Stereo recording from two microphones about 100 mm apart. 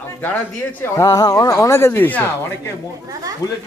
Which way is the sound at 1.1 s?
40° left (ahead or behind).